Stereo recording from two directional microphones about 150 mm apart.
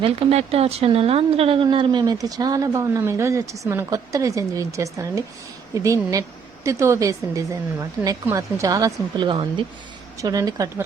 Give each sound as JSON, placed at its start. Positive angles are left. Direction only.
{"t": 0.0, "sound": "speech", "side_deg": -40}